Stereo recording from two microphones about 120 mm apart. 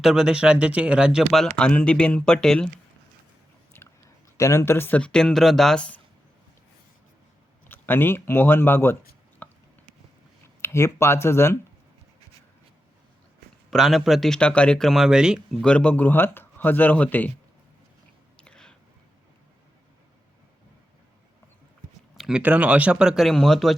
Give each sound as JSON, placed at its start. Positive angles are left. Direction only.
{"t": 0.0, "sound": "speech", "side_deg": -5}
{"t": 3.7, "sound": "chewing", "side_deg": 20}
{"t": 4.4, "sound": "speech", "side_deg": 25}
{"t": 7.7, "sound": "speech", "side_deg": 15}
{"t": 9.4, "sound": "a sound", "side_deg": 15}
{"t": 10.6, "sound": "speech", "side_deg": 20}
{"t": 13.7, "sound": "speech", "side_deg": 0}
{"t": 15.6, "sound": "speech", "side_deg": 10}
{"t": 18.3, "sound": "a sound", "side_deg": 5}
{"t": 22.1, "sound": "speech", "side_deg": -5}